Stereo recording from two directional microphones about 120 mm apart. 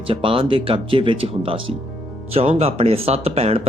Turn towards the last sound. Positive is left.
turn(degrees=-60)  # may be behind; listen again after turning